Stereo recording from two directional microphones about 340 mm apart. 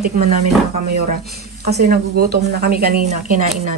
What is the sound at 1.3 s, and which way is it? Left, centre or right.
Speech, right.